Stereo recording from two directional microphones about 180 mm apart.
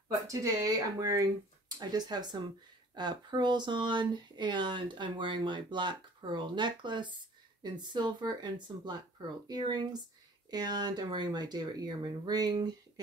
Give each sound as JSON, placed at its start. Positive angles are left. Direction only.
{"t": 0.1, "sound": "speech", "side_deg": -20}